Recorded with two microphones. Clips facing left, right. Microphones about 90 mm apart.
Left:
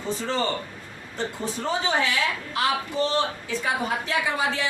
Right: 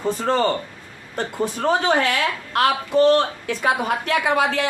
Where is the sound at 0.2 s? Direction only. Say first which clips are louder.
Right 7 dB; 55° right (ahead or behind).